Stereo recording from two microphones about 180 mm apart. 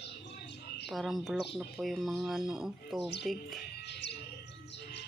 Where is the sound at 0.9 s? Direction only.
Centre (ahead or behind).